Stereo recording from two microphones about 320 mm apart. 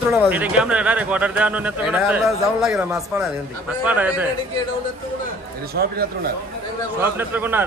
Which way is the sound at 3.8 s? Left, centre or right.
Centre.